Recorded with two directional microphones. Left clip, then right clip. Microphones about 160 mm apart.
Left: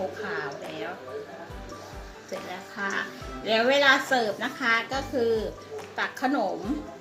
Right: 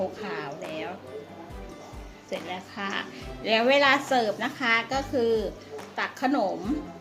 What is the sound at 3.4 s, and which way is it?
A woman's voice, 50° right (ahead or behind).